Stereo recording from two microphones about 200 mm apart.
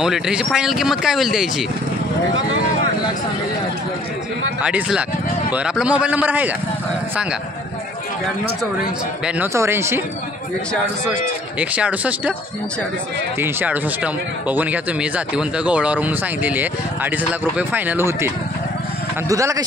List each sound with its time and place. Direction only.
0.0 s speech: 5° right (ahead or behind)
2.3 s vehicle: 75° right (ahead or behind)
4.6 s speech: 5° right (ahead or behind)
9.2 s speech: 10° right (ahead or behind)
11.7 s speech: 5° right (ahead or behind)
13.4 s speech: 10° right (ahead or behind)